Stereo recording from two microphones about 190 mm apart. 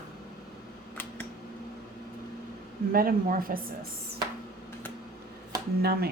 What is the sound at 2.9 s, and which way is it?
Speech, 50° right (ahead or behind).